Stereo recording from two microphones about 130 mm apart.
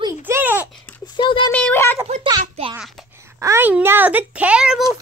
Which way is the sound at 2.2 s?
35° right (ahead or behind).